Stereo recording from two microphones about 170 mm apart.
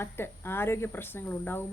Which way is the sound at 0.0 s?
15° left (ahead or behind).